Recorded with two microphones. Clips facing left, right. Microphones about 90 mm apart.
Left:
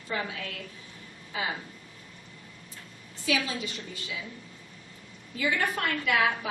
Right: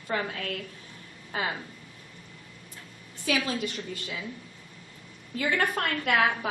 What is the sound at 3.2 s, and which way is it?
Speech, 55° right (ahead or behind).